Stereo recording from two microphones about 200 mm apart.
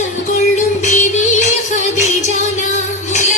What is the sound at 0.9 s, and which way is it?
Music, 35° left (ahead or behind).